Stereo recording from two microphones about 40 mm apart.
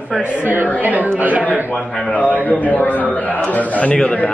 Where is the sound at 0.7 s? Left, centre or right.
Right.